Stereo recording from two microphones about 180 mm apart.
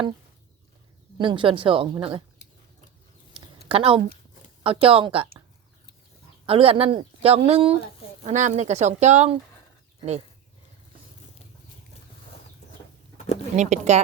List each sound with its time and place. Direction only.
1.2 s a woman's voice: 30° right (ahead or behind)
3.7 s speech: 30° right (ahead or behind)
6.4 s speech: 30° right (ahead or behind)
13.6 s speech: 40° right (ahead or behind)